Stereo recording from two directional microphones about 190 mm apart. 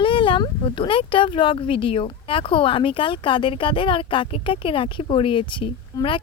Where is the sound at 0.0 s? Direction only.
25° left (ahead or behind).